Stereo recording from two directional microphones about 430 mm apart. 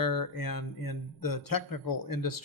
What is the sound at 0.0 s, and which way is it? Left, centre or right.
Speech, left.